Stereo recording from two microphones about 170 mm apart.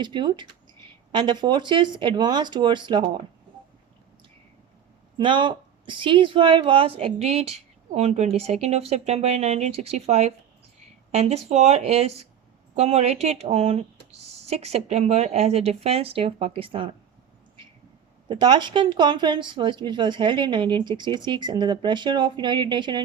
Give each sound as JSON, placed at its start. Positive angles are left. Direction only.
{"t": 0.0, "sound": "speech", "side_deg": -25}
{"t": 5.1, "sound": "a woman's voice", "side_deg": -25}
{"t": 18.3, "sound": "speech", "side_deg": -25}